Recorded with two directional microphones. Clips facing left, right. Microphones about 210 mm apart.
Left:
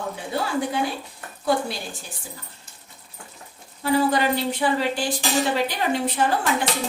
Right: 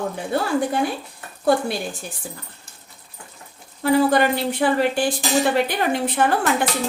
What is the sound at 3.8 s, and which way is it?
Speech, 55° right (ahead or behind).